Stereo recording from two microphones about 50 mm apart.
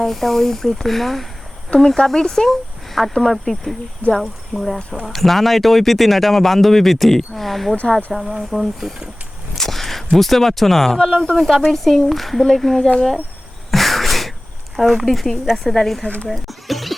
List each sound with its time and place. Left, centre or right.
0.0 s speech: centre
1.7 s speech: left
2.0 s speech: centre
8.1 s speech: centre
13.7 s a sound: centre
14.8 s a woman's voice: centre